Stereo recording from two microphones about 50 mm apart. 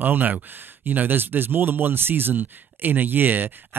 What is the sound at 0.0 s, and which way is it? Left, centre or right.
A man's voice, right.